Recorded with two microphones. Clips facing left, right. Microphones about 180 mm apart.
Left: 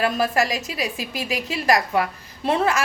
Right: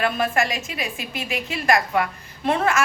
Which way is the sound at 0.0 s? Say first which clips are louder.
Left 1 dB; 35° left (ahead or behind).